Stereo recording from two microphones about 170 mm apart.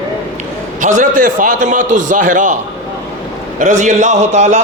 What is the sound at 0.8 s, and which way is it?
A man's voice, 50° right (ahead or behind).